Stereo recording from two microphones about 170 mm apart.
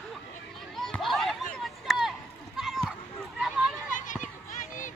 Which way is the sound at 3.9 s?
50° left (ahead or behind).